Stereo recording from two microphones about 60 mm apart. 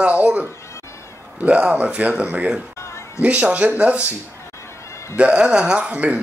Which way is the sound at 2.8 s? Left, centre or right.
Left.